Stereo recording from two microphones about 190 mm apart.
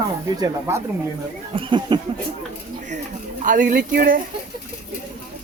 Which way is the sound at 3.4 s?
45° right (ahead or behind).